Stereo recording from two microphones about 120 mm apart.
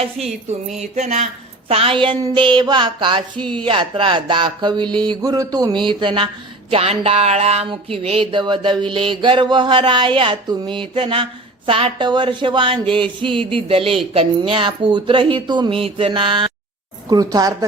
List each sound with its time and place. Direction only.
0.4 s a sound: 75° right (ahead or behind)
1.6 s mantra: 50° right (ahead or behind)
6.7 s speech: 55° right (ahead or behind)
7.7 s mantra: 50° right (ahead or behind)
17.1 s mantra: 30° right (ahead or behind)